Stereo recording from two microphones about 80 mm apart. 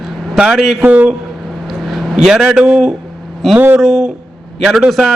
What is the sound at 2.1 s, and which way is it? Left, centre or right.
Speech, centre.